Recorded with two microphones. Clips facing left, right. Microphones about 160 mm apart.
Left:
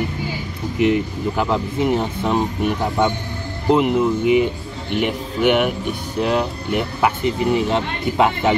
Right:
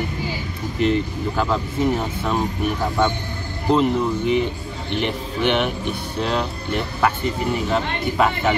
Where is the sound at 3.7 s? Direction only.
10° left (ahead or behind).